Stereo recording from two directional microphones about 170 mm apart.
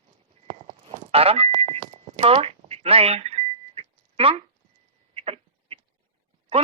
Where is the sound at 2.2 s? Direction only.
35° right (ahead or behind).